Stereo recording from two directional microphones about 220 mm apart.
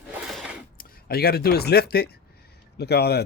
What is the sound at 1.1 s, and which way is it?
Speech, 45° left (ahead or behind).